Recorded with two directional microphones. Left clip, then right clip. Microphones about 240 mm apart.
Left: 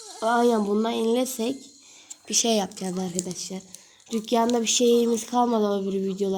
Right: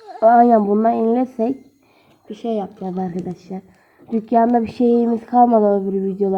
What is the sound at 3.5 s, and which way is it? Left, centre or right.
Speech, centre.